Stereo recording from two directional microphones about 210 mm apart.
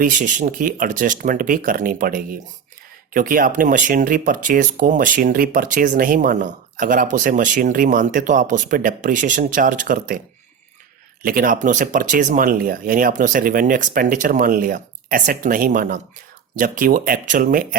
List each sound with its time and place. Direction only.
0.0 s speech: 40° right (ahead or behind)
11.2 s speech: 40° right (ahead or behind)